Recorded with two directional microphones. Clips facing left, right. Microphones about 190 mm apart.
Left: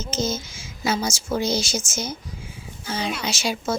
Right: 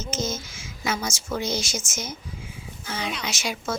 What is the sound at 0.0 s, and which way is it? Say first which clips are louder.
A child's voice: left 3 dB; 30° left (ahead or behind).